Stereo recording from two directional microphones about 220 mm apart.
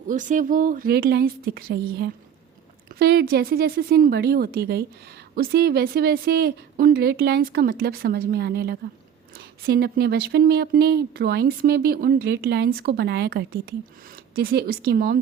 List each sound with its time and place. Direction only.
0.1 s speech: 35° right (ahead or behind)
2.9 s speech: 45° right (ahead or behind)